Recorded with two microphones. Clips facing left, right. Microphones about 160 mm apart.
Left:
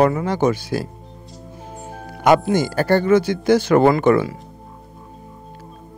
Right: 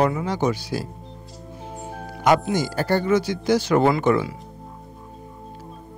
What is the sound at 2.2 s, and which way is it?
Speech, 60° left (ahead or behind).